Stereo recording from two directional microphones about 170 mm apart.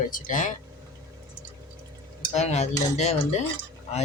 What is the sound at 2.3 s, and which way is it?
Cutlery, 40° left (ahead or behind).